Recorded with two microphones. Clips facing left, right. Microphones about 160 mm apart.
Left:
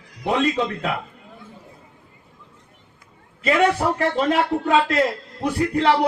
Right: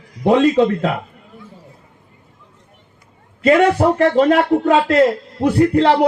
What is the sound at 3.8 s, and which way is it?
Speech, 55° right (ahead or behind).